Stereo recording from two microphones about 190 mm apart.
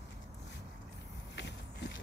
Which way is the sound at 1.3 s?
65° left (ahead or behind).